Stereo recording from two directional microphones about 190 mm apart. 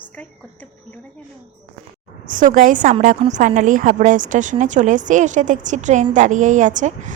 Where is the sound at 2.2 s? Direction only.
45° right (ahead or behind).